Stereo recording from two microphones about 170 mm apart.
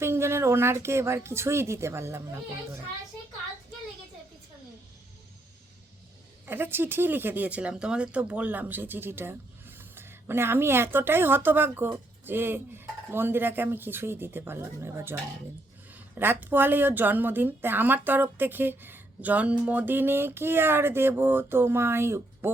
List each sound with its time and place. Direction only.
0.0 s speech: 15° right (ahead or behind)
6.4 s speech: 10° right (ahead or behind)
16.1 s speech: 10° right (ahead or behind)